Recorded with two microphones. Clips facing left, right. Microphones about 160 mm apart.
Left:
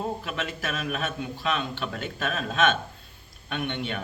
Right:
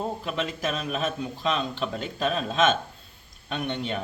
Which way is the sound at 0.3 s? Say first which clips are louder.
Right 3 dB; 35° right (ahead or behind).